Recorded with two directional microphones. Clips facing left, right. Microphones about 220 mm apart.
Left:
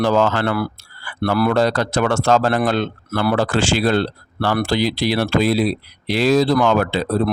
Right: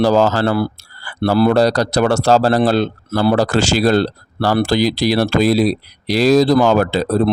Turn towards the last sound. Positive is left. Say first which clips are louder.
# right 3 dB
turn(degrees=-40)  # may be behind; listen again after turning